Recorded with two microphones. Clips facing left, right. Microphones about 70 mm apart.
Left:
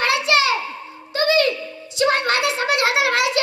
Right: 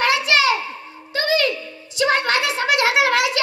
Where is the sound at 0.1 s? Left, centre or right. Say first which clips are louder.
Even; left.